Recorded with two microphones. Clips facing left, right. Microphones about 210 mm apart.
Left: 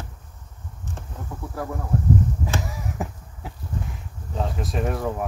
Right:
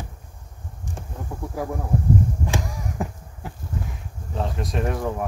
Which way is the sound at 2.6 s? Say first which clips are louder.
Right 1 dB; centre (ahead or behind).